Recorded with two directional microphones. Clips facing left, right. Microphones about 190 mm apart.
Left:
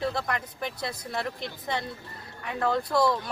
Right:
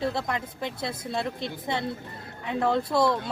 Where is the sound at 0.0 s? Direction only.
20° right (ahead or behind).